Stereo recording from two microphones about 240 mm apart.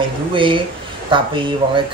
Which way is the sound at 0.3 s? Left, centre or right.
Right.